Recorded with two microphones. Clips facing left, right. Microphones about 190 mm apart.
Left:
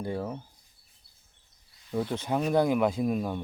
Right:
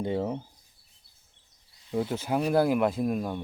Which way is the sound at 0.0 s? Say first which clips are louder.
Right 4 dB; 20° right (ahead or behind).